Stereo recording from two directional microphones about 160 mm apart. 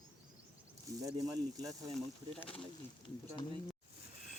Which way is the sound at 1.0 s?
20° right (ahead or behind).